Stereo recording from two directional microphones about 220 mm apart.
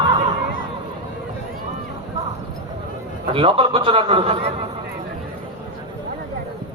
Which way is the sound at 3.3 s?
25° right (ahead or behind).